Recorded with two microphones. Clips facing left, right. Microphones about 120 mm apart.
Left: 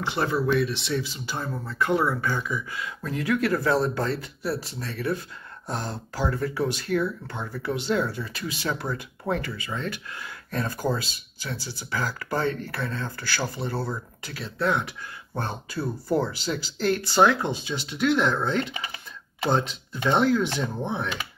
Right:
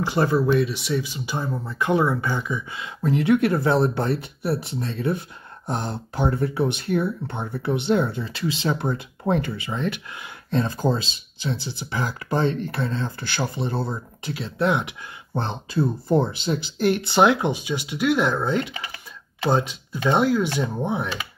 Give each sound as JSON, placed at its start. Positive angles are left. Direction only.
{"t": 0.2, "sound": "speech", "side_deg": -15}
{"t": 18.7, "sound": "speech", "side_deg": 20}
{"t": 19.5, "sound": "speech", "side_deg": -10}